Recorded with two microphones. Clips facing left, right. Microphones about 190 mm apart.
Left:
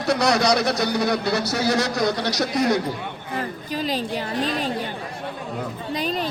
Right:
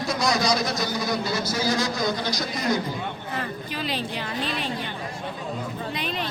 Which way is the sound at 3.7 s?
40° left (ahead or behind).